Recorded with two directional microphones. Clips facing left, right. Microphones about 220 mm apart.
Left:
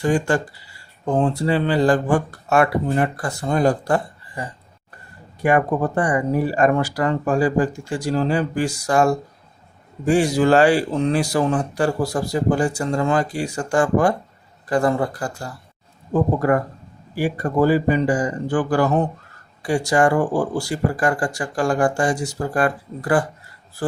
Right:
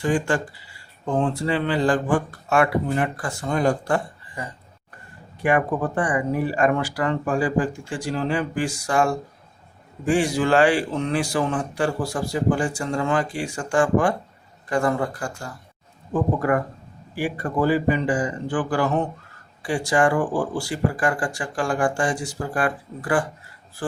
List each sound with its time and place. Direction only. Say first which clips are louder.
0.0 s speech: left 3 dB; 40° left (ahead or behind)